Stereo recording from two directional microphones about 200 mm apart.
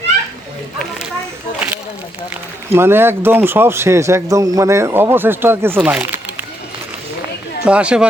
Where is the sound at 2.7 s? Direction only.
10° right (ahead or behind).